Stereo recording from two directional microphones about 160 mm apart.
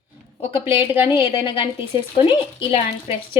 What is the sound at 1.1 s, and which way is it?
Speech, 35° left (ahead or behind).